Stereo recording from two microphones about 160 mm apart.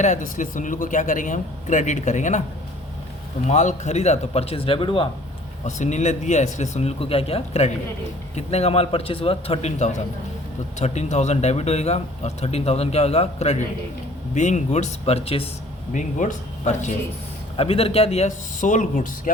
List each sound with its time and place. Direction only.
0.0 s speech: 50° left (ahead or behind)
3.4 s speech: 45° left (ahead or behind); by 5.0 s 30° left (ahead or behind)
5.6 s speech: 50° left (ahead or behind)
15.9 s speech: 50° left (ahead or behind)
17.6 s speech: 35° left (ahead or behind); by 19.3 s 55° left (ahead or behind)